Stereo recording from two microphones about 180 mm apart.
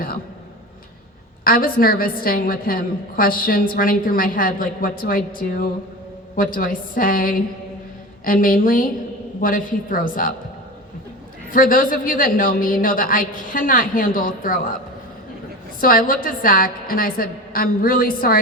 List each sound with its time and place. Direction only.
1.5 s a woman's voice: 55° left (ahead or behind)
11.5 s a woman's voice: 50° left (ahead or behind)
15.8 s a woman's voice: 50° left (ahead or behind)